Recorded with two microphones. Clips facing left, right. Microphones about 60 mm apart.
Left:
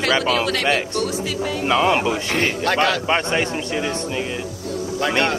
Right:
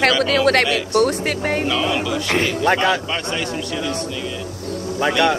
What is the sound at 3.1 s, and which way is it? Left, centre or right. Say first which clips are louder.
Speech: left 4 dB; left.